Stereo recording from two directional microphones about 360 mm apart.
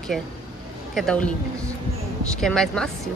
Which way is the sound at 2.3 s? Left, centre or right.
Centre.